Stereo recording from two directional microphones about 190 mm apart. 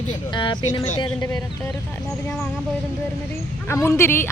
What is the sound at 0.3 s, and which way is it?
Speech, 25° left (ahead or behind).